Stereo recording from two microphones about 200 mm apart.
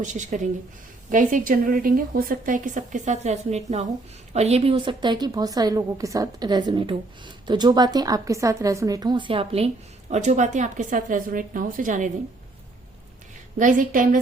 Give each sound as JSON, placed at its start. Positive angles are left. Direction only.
{"t": 0.0, "sound": "a woman's voice", "side_deg": -40}
{"t": 13.6, "sound": "a woman's voice", "side_deg": -40}